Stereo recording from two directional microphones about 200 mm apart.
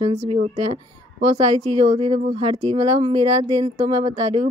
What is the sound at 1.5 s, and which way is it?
Speech, 30° right (ahead or behind).